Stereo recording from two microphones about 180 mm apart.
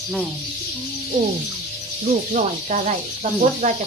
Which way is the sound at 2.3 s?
40° right (ahead or behind).